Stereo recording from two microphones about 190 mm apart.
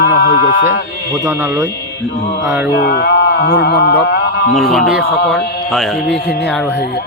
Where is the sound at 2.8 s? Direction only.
55° left (ahead or behind).